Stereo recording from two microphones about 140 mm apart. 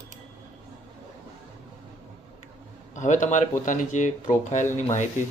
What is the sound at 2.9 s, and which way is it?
Speech, 60° left (ahead or behind).